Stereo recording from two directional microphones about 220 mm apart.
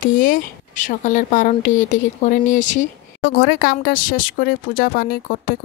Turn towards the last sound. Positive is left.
turn(degrees=40)  # may be behind; listen again after turning